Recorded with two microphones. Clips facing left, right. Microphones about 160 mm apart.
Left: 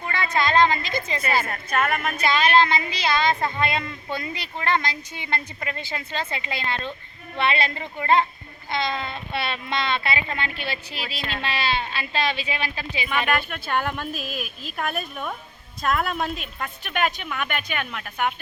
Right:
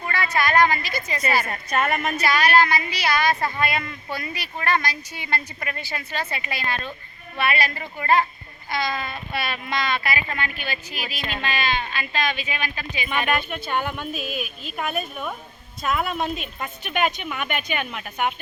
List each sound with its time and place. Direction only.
0.3 s speech: 20° left (ahead or behind)
1.5 s a woman's voice: 5° right (ahead or behind)
2.2 s speech: 25° left (ahead or behind)
13.1 s a woman's voice: centre (ahead or behind)